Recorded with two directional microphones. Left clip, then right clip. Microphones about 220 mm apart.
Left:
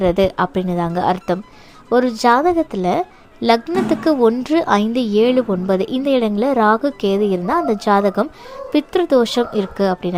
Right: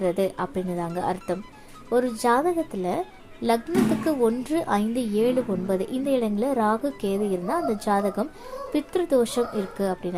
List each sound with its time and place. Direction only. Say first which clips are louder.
0.0 s a woman's voice: left 9 dB; 25° left (ahead or behind)